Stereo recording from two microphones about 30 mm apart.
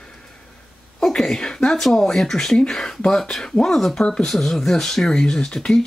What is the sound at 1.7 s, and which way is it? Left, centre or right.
Speech, centre.